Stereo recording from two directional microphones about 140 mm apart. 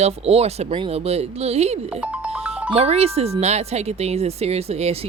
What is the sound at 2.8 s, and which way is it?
Speech, 50° right (ahead or behind).